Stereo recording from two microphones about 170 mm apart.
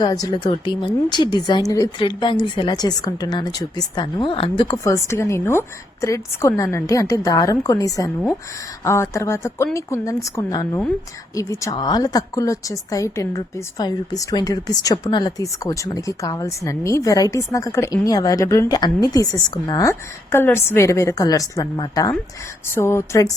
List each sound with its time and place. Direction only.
0.0 s a woman's voice: 25° left (ahead or behind)